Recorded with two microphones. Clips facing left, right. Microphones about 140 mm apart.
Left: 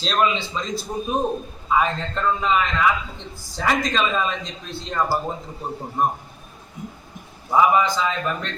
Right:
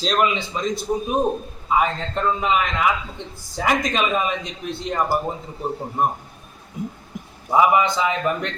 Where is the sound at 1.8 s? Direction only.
15° right (ahead or behind).